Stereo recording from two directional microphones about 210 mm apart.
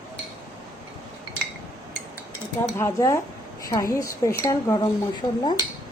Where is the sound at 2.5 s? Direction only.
15° left (ahead or behind).